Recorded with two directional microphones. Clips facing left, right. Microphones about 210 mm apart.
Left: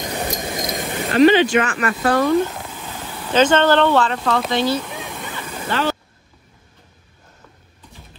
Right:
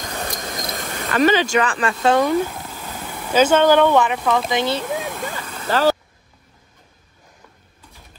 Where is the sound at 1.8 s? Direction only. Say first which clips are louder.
Right 1 dB; 25° right (ahead or behind).